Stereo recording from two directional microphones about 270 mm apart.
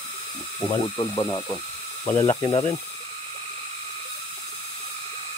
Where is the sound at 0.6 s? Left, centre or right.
Centre.